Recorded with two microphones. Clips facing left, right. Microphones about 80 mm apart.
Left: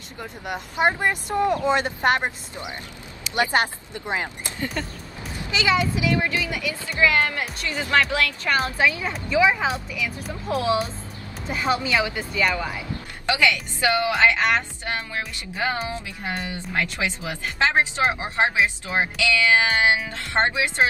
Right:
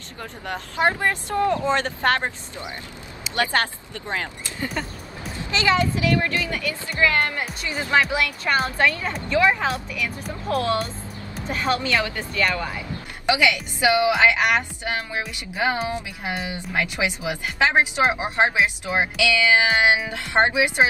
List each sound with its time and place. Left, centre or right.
0.2 s a woman's voice: centre
4.8 s speech: centre
5.9 s a woman's voice: centre
7.2 s a woman's voice: centre
13.3 s speech: centre